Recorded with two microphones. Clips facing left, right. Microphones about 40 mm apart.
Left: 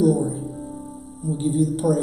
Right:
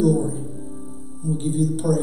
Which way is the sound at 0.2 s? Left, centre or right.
Centre.